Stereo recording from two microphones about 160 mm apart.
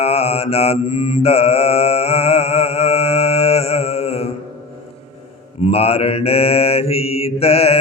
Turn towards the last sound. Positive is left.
turn(degrees=40)  # may be behind; listen again after turning